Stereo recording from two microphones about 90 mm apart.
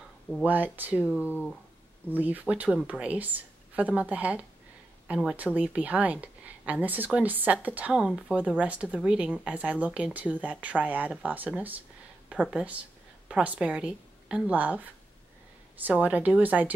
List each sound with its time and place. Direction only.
0.5 s a woman's voice: 20° right (ahead or behind)